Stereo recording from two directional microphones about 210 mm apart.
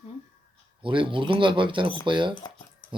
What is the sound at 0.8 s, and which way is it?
Speech, 25° right (ahead or behind).